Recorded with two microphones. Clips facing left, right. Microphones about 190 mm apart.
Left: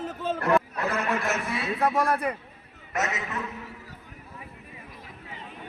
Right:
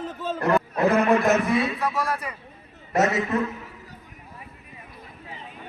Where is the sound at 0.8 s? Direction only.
35° right (ahead or behind).